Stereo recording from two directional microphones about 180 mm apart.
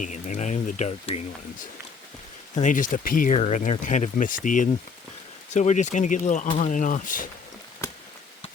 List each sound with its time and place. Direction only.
0.0 s speech: 40° left (ahead or behind)
2.6 s speech: 45° left (ahead or behind)